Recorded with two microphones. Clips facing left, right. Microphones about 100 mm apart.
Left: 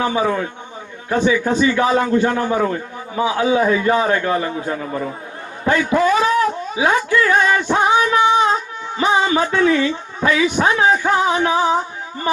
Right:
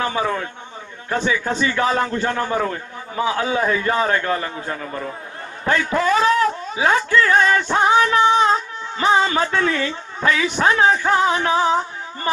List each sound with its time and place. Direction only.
0.0 s a man's voice: 20° left (ahead or behind)
1.5 s a man's voice: 15° left (ahead or behind)
5.7 s a man's voice: 15° left (ahead or behind)
7.2 s music: 15° left (ahead or behind)